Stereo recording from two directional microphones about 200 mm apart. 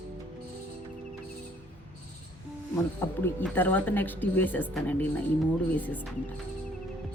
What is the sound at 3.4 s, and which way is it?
A woman's voice, 10° left (ahead or behind).